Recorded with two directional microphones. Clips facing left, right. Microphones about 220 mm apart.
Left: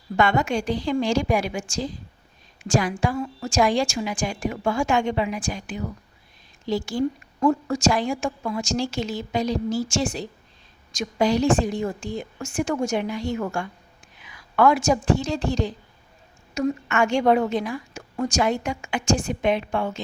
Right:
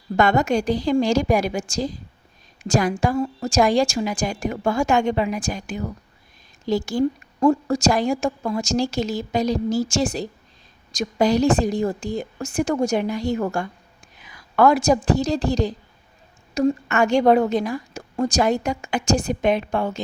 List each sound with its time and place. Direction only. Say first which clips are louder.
0.2 s a woman's voice: right 3 dB; 40° right (ahead or behind)